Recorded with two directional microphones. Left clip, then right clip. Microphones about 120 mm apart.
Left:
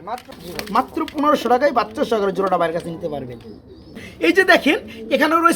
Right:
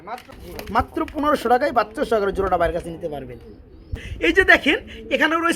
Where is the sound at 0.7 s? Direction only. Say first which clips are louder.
Left 2 dB; 55° right (ahead or behind).